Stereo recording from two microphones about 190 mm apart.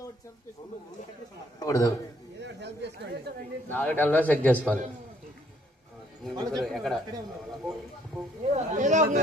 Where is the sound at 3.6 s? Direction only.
10° left (ahead or behind).